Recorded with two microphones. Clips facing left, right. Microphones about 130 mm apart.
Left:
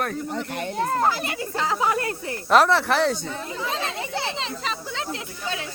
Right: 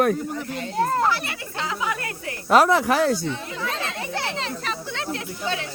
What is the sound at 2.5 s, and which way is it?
Speech, 10° right (ahead or behind).